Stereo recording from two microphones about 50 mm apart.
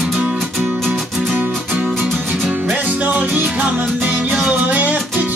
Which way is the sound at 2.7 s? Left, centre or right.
Right.